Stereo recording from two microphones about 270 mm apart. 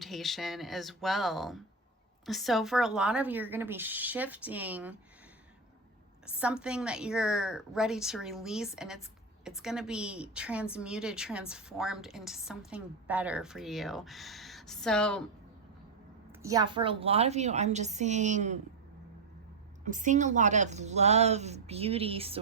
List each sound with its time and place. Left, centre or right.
0.0 s a woman's voice: centre
6.4 s a woman's voice: centre
16.4 s a woman's voice: centre
19.8 s a woman's voice: right